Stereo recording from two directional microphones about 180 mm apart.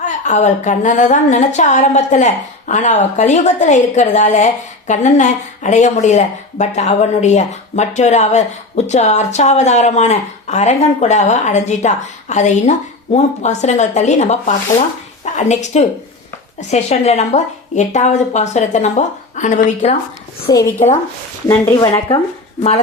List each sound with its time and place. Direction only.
0.0 s a woman's voice: 40° left (ahead or behind)
20.5 s speech: 20° left (ahead or behind)
21.7 s speech: 25° left (ahead or behind)